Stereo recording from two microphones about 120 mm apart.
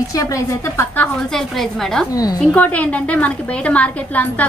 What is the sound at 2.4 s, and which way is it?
A woman's voice, 10° left (ahead or behind).